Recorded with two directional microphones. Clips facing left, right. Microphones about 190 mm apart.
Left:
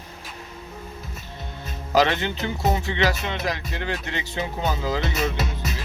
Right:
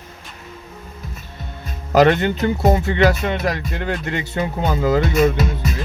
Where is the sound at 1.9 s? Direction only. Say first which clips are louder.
Right 7 dB; 55° right (ahead or behind).